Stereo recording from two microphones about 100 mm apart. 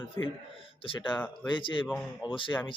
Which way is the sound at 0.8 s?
60° left (ahead or behind).